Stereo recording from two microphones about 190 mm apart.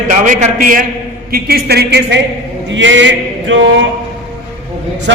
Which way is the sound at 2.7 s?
75° right (ahead or behind).